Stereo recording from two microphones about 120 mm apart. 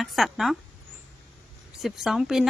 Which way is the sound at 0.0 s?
Centre (ahead or behind).